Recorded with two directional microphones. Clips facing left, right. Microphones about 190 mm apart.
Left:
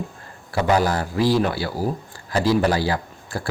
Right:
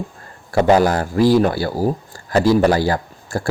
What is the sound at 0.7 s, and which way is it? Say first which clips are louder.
Speech: right 5 dB; 45° right (ahead or behind).